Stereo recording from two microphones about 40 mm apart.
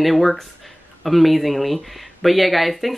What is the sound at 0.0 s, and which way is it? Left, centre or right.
Speech, centre.